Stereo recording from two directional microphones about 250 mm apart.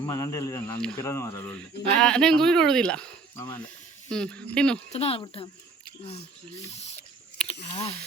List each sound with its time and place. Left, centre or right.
0.0 s speech: centre
4.9 s speech: left
7.4 s speech: left